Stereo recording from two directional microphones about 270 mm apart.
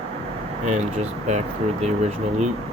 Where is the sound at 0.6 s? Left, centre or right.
Right.